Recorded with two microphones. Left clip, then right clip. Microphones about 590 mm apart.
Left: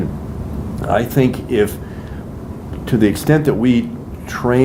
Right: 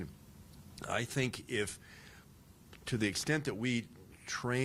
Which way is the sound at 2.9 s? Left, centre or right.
Right.